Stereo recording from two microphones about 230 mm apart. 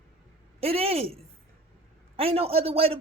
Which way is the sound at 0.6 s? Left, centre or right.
Right.